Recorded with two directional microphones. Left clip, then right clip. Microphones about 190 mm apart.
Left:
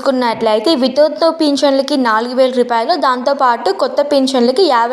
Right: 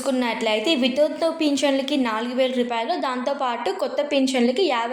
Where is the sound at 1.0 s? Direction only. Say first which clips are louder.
Left 9 dB; 15° left (ahead or behind).